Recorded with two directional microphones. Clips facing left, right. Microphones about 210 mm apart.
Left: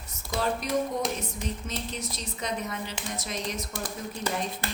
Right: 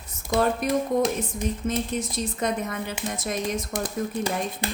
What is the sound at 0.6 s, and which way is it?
A woman's voice, 55° right (ahead or behind).